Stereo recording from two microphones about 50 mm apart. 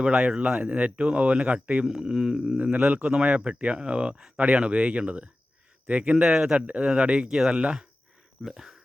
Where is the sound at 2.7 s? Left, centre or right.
Right.